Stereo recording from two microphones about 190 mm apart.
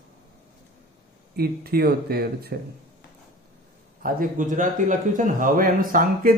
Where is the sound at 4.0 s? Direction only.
50° right (ahead or behind).